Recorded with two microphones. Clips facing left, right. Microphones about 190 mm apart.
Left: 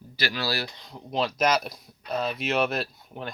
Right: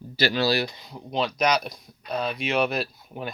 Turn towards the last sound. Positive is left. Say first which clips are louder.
# right 2 dB
turn(degrees=-5)  # may be behind; listen again after turning